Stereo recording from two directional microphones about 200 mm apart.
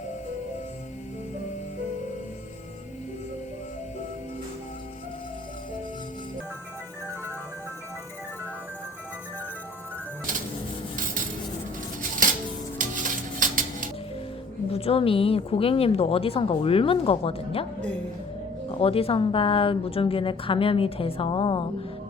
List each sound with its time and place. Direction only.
12.2 s music: 40° right (ahead or behind)
14.7 s a woman's voice: 30° left (ahead or behind)
18.7 s a woman's voice: 30° left (ahead or behind)